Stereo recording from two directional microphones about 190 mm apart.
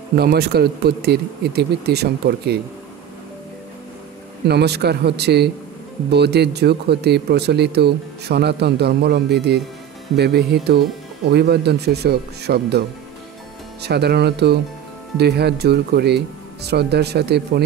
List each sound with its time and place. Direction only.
0.1 s speech: 55° right (ahead or behind)
4.5 s speech: 60° right (ahead or behind)
13.8 s speech: 60° right (ahead or behind)